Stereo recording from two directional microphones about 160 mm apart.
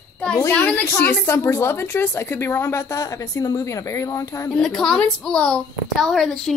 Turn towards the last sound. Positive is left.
turn(degrees=0)  # may be behind; listen again after turning